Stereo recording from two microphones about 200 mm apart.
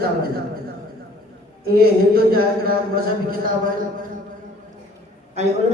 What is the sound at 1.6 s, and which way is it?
Speech, 50° right (ahead or behind).